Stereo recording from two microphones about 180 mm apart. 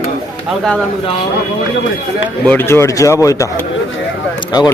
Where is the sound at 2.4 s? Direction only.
10° left (ahead or behind).